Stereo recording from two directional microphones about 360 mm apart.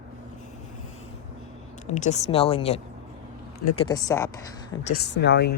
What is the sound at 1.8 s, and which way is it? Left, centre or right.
Speech, centre.